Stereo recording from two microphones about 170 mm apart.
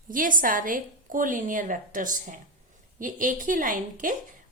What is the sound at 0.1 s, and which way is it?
A woman's voice, 55° right (ahead or behind).